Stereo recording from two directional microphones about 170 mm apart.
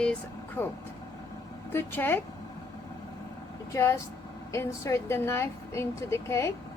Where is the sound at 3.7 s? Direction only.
15° left (ahead or behind).